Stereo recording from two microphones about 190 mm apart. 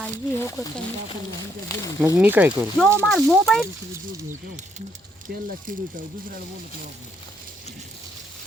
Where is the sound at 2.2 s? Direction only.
10° right (ahead or behind).